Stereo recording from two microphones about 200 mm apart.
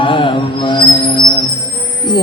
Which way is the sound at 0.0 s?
25° left (ahead or behind).